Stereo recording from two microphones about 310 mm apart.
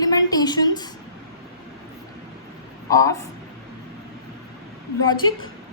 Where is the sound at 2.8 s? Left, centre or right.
Centre.